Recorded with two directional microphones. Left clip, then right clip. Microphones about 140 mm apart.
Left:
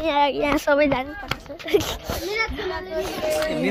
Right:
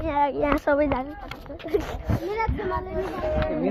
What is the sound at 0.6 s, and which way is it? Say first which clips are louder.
A woman's voice: left 3 dB; 90° left.